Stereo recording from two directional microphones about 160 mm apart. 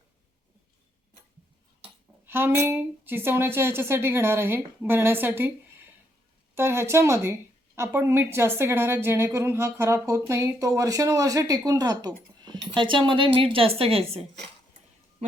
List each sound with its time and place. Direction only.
2.2 s a woman's voice: 15° right (ahead or behind); by 14.2 s 35° right (ahead or behind)